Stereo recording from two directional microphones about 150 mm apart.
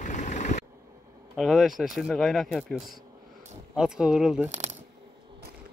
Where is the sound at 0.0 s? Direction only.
55° left (ahead or behind).